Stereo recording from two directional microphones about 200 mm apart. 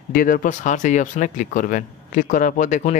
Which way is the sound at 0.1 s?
45° left (ahead or behind).